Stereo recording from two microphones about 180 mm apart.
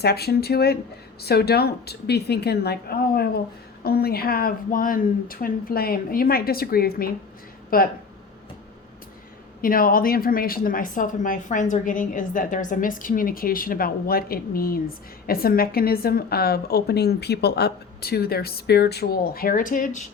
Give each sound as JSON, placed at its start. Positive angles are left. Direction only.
{"t": 0.0, "sound": "a woman's voice", "side_deg": 60}
{"t": 9.6, "sound": "a woman's voice", "side_deg": 50}